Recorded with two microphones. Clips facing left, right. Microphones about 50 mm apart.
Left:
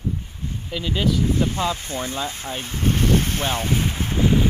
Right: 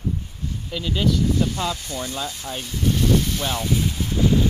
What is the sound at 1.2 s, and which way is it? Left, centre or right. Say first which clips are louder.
Vehicle: left 1 dB; left.